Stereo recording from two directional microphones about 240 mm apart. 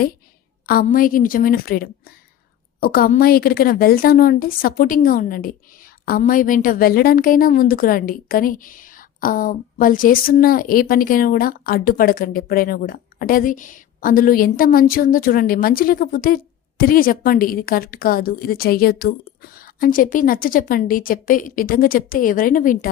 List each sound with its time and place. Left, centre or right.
0.6 s a woman's voice: left